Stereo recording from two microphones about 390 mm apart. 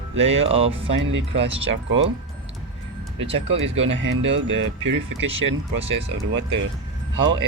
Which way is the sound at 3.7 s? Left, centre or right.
Right.